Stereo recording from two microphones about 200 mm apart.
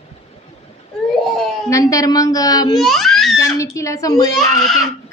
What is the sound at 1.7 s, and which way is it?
A woman's voice, 15° left (ahead or behind).